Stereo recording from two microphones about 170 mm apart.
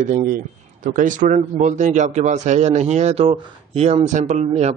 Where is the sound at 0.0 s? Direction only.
50° right (ahead or behind).